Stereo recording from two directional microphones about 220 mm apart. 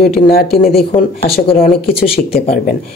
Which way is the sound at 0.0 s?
45° left (ahead or behind).